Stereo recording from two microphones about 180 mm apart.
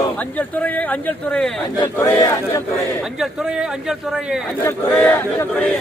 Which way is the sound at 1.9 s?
15° left (ahead or behind).